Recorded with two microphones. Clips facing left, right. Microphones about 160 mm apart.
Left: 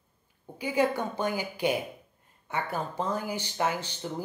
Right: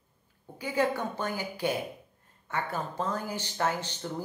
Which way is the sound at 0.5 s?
15° left (ahead or behind).